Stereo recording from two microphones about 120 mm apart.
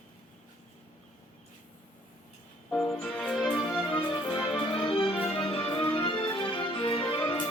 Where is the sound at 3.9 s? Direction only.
45° left (ahead or behind).